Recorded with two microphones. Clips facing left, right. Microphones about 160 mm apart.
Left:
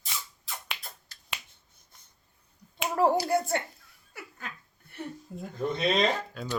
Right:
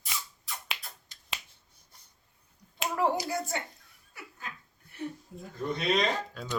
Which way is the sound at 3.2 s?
60° left (ahead or behind).